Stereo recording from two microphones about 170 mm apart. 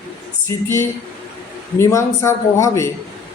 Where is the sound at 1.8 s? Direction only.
15° left (ahead or behind).